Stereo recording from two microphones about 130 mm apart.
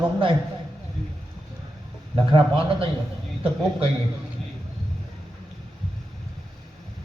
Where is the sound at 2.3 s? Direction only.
45° right (ahead or behind).